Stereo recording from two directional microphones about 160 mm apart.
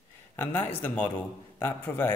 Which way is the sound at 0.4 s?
15° left (ahead or behind).